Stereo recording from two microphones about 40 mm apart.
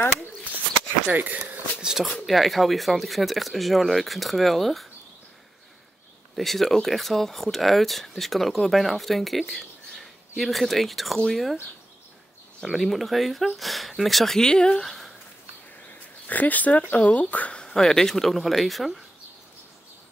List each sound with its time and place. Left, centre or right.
1.0 s speech: right
1.8 s speech: centre
2.2 s speech: centre
6.3 s speech: centre
12.7 s speech: centre; by 14.9 s left
14.9 s a sound: centre
15.9 s a sound: left
16.9 s speech: left
17.6 s speech: centre